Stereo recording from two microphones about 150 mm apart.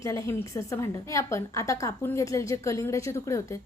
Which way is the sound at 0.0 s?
20° left (ahead or behind).